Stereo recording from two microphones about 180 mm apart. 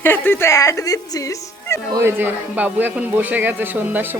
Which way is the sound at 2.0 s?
10° right (ahead or behind).